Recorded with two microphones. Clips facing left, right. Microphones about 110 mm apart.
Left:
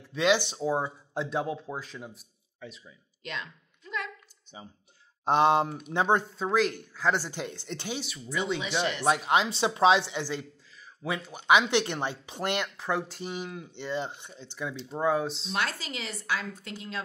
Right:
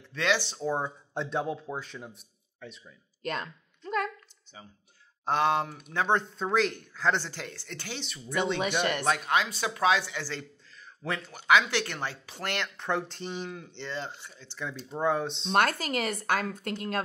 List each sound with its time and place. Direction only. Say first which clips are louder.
0.1 s speech: left 4 dB; 15° left (ahead or behind)
0.7 s a man's voice: left 2 dB; 5° left (ahead or behind)
3.2 s a sound: right 5 dB; 45° right (ahead or behind)
4.5 s speech: left 3 dB; 20° left (ahead or behind)
5.9 s speech: left 2 dB; 10° left (ahead or behind)
8.0 s a man's voice: left 1 dB; 5° left (ahead or behind)
8.5 s speech: right 2 dB; 55° right (ahead or behind)
9.0 s speech: left 2 dB; 15° left (ahead or behind)
11.0 s speech: left 1 dB; 5° left (ahead or behind)
11.4 s speech: left 1 dB; 20° left (ahead or behind)
12.7 s speech: even; 5° left (ahead or behind)
14.9 s a man's voice: left 1 dB; 5° left (ahead or behind)
15.5 s speech: right 9 dB; 55° right (ahead or behind)